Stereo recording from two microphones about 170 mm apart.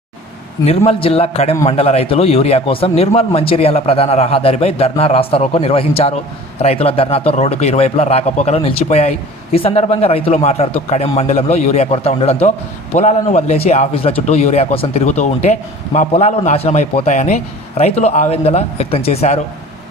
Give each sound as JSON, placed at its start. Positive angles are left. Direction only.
{"t": 0.9, "sound": "a man's voice", "side_deg": 35}